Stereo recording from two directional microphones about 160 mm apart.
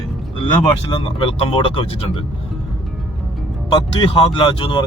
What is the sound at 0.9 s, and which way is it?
Speech, 35° left (ahead or behind).